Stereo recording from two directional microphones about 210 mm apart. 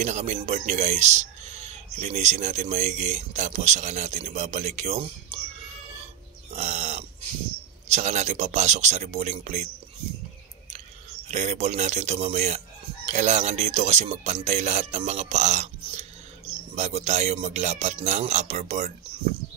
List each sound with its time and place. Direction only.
0.0 s speech: 35° right (ahead or behind)
6.5 s sheep: 35° right (ahead or behind)
7.9 s speech: 35° right (ahead or behind)
11.2 s speech: 35° right (ahead or behind)